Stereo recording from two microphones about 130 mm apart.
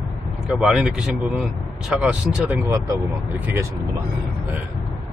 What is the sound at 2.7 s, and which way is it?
Speech, 25° right (ahead or behind).